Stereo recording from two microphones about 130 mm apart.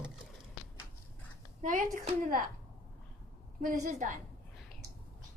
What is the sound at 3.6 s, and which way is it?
Speech, 70° right (ahead or behind).